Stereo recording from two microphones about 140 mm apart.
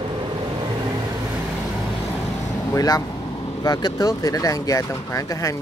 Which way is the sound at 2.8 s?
25° left (ahead or behind).